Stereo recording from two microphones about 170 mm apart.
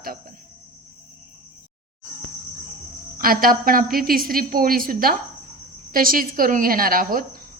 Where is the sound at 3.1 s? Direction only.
60° right (ahead or behind).